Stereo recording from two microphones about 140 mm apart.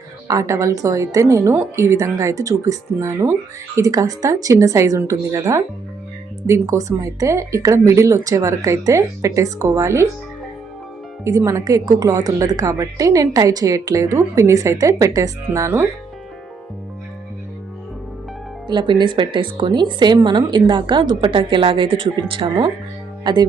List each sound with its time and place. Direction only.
0.3 s a woman's voice: 20° right (ahead or behind)
11.2 s a woman's voice: 20° right (ahead or behind)
18.7 s speech: 35° right (ahead or behind)